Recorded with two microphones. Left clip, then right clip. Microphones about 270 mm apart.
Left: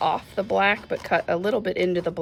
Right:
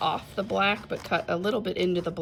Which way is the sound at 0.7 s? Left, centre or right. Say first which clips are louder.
Left 4 dB; centre.